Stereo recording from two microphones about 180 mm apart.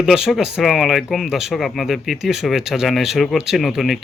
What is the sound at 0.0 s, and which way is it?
Speech, centre (ahead or behind).